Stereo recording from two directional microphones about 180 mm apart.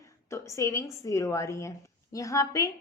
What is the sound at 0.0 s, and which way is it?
A woman's voice, 15° left (ahead or behind).